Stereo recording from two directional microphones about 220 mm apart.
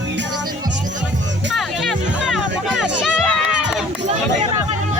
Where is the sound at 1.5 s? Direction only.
Centre (ahead or behind).